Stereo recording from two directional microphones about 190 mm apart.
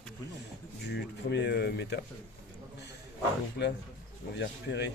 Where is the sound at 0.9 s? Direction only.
65° left (ahead or behind).